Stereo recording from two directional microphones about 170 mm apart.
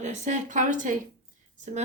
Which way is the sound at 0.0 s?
45° right (ahead or behind).